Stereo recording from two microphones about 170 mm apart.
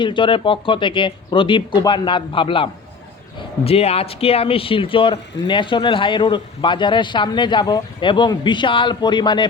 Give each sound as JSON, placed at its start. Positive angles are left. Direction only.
{"t": 0.0, "sound": "speech", "side_deg": 30}